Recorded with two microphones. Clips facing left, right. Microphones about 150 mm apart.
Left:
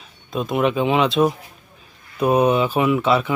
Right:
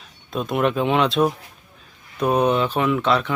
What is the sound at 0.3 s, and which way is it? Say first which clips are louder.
Speech: left 1 dB; centre (ahead or behind).